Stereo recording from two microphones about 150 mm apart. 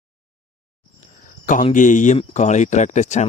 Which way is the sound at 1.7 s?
60° left (ahead or behind).